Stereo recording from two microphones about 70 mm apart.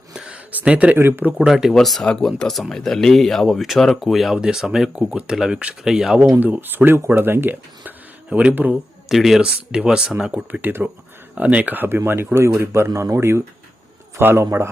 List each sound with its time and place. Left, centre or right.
0.1 s a sound: centre
0.5 s speech: centre
0.9 s speech: right
1.4 s speech: centre
6.4 s speech: right
8.3 s speech: centre
9.0 s speech: centre; by 10.8 s right
11.3 s speech: centre